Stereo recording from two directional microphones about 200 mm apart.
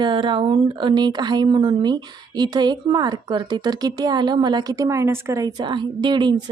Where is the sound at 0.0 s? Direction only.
25° right (ahead or behind).